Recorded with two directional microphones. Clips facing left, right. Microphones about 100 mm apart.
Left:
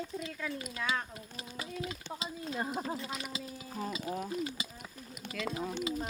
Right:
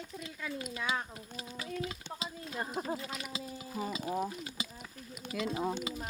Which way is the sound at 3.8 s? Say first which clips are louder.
Right 2 dB; 10° right (ahead or behind).